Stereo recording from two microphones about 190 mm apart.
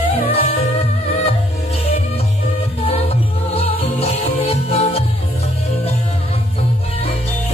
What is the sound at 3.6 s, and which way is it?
Music, 30° left (ahead or behind).